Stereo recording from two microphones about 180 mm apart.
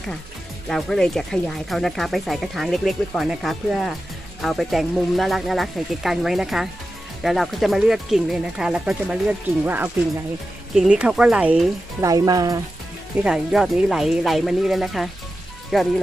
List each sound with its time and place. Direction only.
0.7 s speech: centre (ahead or behind)
12.0 s speech: 20° right (ahead or behind)
13.2 s speech: 5° right (ahead or behind)